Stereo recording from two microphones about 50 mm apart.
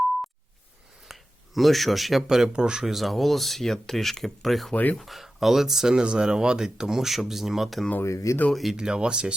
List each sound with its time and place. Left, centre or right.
1.0 s a sound: centre
2.2 s speech: centre
4.7 s speech: left
4.9 s speech: centre
8.0 s speech: left
8.7 s speech: centre